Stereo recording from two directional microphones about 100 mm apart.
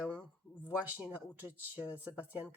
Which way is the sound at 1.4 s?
15° right (ahead or behind).